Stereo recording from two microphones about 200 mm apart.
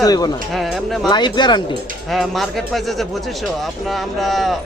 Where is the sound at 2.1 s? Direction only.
Centre (ahead or behind).